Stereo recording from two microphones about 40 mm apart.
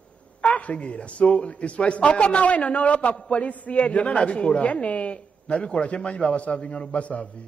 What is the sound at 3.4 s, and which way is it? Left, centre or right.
A woman's voice, left.